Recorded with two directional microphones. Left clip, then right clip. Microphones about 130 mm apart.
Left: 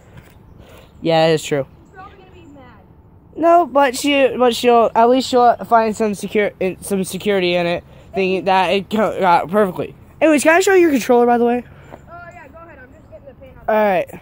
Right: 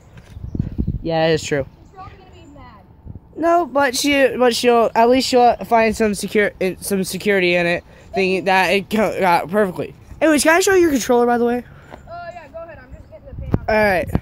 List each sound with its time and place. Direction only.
1.0 s speech: 5° left (ahead or behind)
3.3 s speech: 5° left (ahead or behind)
9.5 s speech: centre (ahead or behind)
12.2 s a sound: 90° right
13.7 s speech: 10° right (ahead or behind)